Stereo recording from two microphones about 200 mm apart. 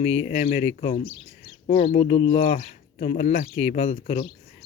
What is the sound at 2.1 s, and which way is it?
Speech, 25° left (ahead or behind).